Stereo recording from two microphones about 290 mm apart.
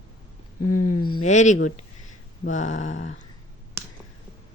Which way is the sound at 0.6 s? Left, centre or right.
Left.